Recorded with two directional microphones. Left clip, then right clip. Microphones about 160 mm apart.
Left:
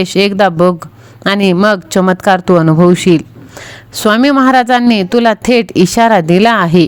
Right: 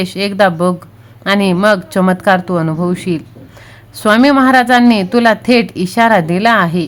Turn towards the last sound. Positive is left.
turn(degrees=50)  # may be behind; listen again after turning